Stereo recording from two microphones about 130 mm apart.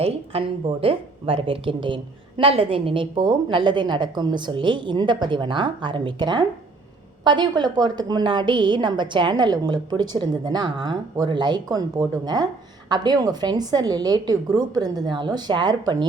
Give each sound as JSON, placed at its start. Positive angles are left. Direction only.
{"t": 0.0, "sound": "a woman's voice", "side_deg": -45}